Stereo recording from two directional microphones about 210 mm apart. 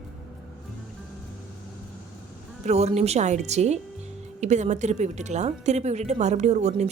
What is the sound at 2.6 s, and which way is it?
A woman's voice, 30° right (ahead or behind).